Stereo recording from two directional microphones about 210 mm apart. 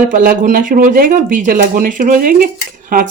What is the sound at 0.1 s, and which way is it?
Speech, 40° right (ahead or behind).